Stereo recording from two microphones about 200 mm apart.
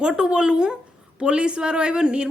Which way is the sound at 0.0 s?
5° right (ahead or behind).